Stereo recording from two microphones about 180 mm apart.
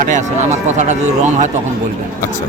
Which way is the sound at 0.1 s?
40° right (ahead or behind).